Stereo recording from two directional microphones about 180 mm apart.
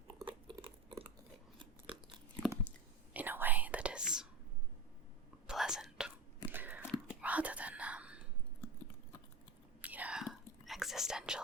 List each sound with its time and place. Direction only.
0.2 s biting: 25° right (ahead or behind)
1.9 s crunch: 5° right (ahead or behind)
3.1 s whispering: 10° right (ahead or behind)
5.5 s whispering: 5° right (ahead or behind)
6.5 s a sound: 10° right (ahead or behind)
7.1 s whispering: 10° right (ahead or behind)
9.8 s whispering: 10° right (ahead or behind)